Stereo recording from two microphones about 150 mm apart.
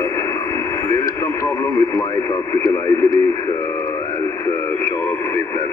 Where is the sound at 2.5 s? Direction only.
20° left (ahead or behind).